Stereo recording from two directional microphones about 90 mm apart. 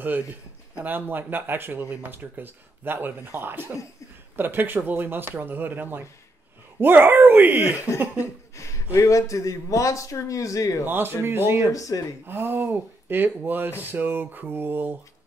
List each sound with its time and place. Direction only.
0.7 s speech: 20° right (ahead or behind)
8.2 s a sound: 35° left (ahead or behind)
8.9 s a man's voice: 35° left (ahead or behind)
10.9 s speech: 25° right (ahead or behind)
11.7 s a man's voice: 40° left (ahead or behind)
12.3 s speech: 25° right (ahead or behind)